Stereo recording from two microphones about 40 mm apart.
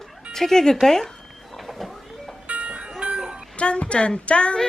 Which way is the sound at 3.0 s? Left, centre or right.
Right.